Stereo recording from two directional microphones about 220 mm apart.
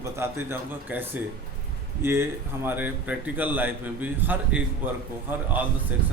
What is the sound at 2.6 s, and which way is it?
Speech, 10° right (ahead or behind).